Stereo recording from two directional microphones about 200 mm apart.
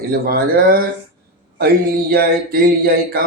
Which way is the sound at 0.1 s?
50° right (ahead or behind).